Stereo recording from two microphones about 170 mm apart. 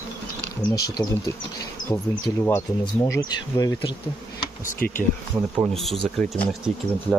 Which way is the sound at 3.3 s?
25° left (ahead or behind).